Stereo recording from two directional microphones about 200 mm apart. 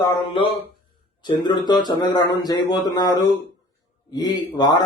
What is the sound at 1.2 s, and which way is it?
Speech, 20° left (ahead or behind).